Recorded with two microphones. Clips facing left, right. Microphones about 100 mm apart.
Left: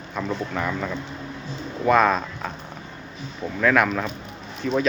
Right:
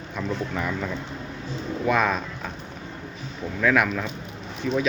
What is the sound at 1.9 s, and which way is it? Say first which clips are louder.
Speech: left 5 dB; 10° right (ahead or behind).